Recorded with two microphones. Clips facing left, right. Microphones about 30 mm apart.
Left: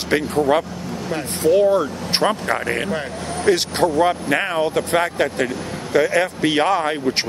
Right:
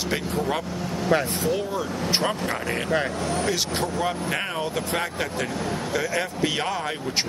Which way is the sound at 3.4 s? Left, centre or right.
Left.